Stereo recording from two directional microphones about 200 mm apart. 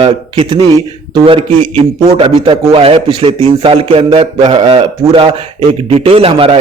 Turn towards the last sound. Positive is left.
turn(degrees=-30)  # may be behind; listen again after turning